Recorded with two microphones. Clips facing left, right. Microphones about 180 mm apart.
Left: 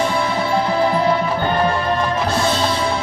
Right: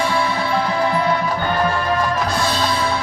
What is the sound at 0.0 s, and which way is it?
Music, 20° left (ahead or behind).